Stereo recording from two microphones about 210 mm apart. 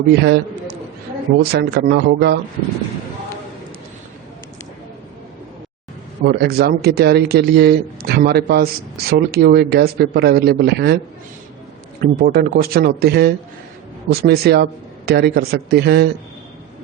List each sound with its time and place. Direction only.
0.1 s a man's voice: 50° right (ahead or behind)
6.2 s speech: 50° right (ahead or behind)
12.2 s speech: 45° right (ahead or behind)